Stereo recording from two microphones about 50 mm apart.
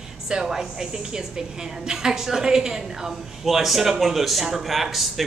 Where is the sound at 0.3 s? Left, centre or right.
Centre.